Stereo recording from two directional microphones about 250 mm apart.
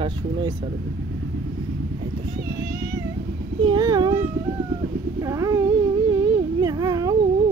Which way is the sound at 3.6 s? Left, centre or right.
Centre.